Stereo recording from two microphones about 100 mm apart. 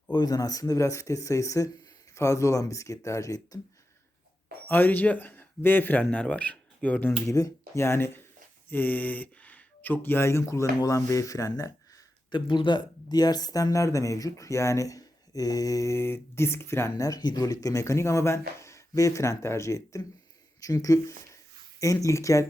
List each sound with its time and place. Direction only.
0.1 s speech: 45° left (ahead or behind)
4.7 s speech: 20° left (ahead or behind)
7.3 s speech: 35° left (ahead or behind)
12.3 s speech: 50° left (ahead or behind); by 17.1 s 25° left (ahead or behind)
17.1 s speech: 40° left (ahead or behind)